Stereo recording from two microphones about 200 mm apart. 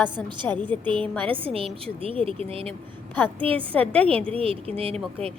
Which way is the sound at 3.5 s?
5° left (ahead or behind).